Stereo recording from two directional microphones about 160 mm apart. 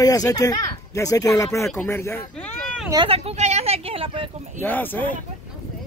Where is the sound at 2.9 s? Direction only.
35° right (ahead or behind).